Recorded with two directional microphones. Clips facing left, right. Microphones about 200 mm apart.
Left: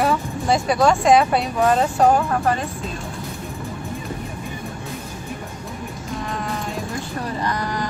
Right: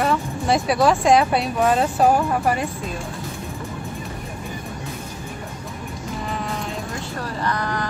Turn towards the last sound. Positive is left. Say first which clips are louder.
# even
turn(degrees=15)  # may be behind; listen again after turning